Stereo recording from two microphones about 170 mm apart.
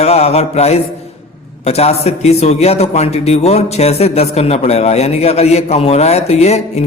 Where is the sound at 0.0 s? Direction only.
40° left (ahead or behind).